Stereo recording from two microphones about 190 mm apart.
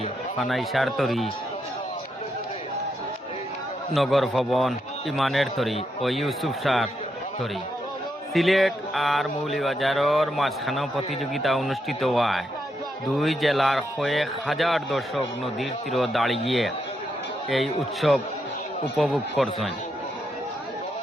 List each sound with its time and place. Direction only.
0.4 s speech: centre (ahead or behind)
3.9 s speech: centre (ahead or behind)
8.3 s speech: centre (ahead or behind)